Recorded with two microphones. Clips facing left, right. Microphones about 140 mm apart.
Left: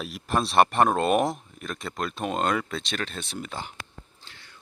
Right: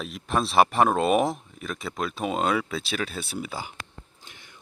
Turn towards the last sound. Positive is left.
turn(degrees=-15)  # may be behind; listen again after turning